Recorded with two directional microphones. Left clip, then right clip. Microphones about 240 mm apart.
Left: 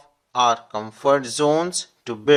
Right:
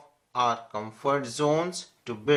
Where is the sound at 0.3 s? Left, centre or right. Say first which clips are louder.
Left 7 dB; left.